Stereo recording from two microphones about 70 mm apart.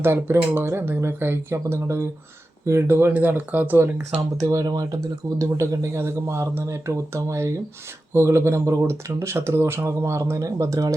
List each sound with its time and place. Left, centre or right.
0.0 s speech: right
3.1 s speech: right
4.4 s speech: right
5.4 s speech: right